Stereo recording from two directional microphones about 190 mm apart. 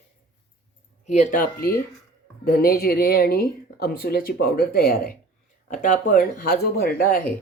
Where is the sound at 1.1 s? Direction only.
40° left (ahead or behind).